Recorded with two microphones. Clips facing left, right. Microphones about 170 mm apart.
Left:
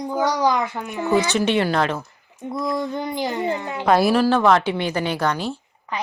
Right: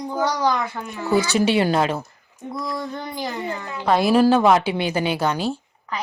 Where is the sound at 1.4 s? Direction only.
10° right (ahead or behind).